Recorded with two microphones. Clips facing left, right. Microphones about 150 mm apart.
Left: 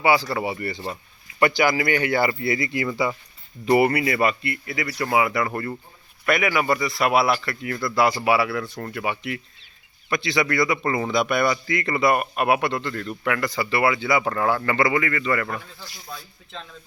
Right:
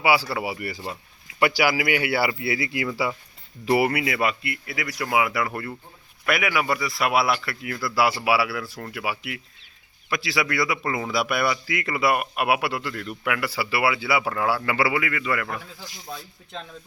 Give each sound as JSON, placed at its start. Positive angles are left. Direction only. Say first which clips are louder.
{"t": 0.0, "sound": "speech", "louder": "left 2 dB", "side_deg": -10}
{"t": 15.9, "sound": "speech", "louder": "right 2 dB", "side_deg": -20}